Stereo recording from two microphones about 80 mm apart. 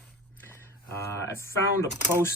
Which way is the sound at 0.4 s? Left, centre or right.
Left.